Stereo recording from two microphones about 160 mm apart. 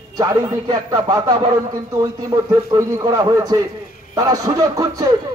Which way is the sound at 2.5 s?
25° right (ahead or behind).